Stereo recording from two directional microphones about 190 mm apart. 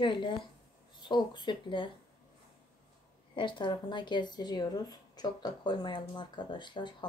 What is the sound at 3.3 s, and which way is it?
Speech, 25° left (ahead or behind).